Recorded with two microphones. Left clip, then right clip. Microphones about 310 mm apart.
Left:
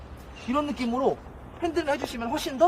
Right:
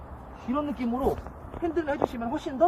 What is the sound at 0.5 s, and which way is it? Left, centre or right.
Speech, centre.